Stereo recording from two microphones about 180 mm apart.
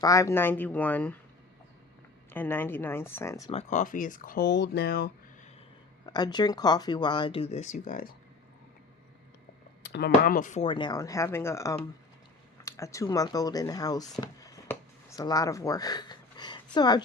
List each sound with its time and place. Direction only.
0.0 s speech: 15° left (ahead or behind)
2.3 s speech: 10° left (ahead or behind)
3.5 s speech: 40° left (ahead or behind); by 5.1 s 60° left (ahead or behind)
6.1 s speech: 25° left (ahead or behind); by 8.1 s 50° left (ahead or behind)
9.8 s speech: 65° left (ahead or behind); by 17.0 s 25° left (ahead or behind)